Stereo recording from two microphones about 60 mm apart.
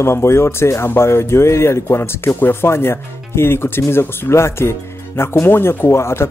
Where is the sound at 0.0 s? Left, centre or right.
Left.